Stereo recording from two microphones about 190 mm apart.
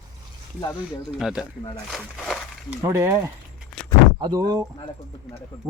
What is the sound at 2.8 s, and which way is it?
Speech, 15° right (ahead or behind).